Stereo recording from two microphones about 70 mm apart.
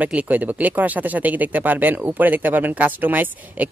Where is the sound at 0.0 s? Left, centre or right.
Right.